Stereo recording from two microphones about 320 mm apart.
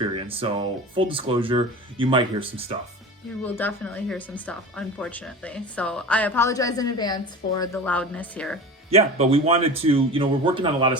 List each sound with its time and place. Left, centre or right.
0.0 s speech: centre
3.4 s speech: centre
8.9 s speech: centre